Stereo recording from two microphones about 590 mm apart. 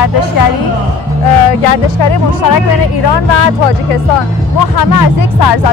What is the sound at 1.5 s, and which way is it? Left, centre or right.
Speech, left.